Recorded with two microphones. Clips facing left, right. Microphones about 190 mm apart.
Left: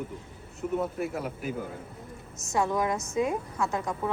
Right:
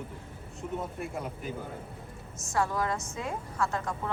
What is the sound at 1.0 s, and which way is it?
Speech, 5° left (ahead or behind).